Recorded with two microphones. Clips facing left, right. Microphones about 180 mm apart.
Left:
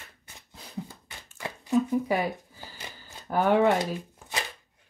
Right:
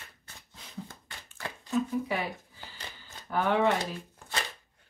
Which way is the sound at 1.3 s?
15° left (ahead or behind).